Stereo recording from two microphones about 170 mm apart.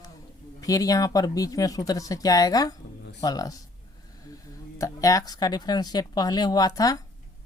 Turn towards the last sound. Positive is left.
turn(degrees=20)  # may be behind; listen again after turning